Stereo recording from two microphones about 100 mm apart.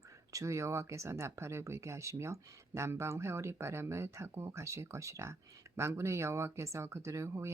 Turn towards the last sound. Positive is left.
turn(degrees=-30)  # may be behind; listen again after turning